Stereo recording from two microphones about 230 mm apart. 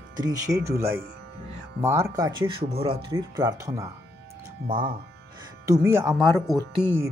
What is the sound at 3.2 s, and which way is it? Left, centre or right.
Speech, centre.